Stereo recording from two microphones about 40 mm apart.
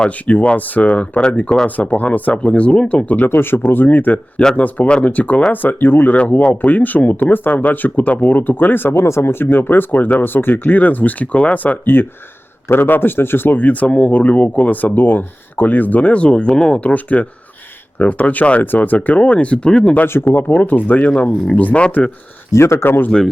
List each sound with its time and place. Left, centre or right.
0.3 s speech: left
3.2 s speech: left
6.1 s speech: left
12.7 s speech: left
16.9 s speech: left
20.1 s speech: left
20.6 s speech: left
21.5 s speech: left
22.6 s speech: left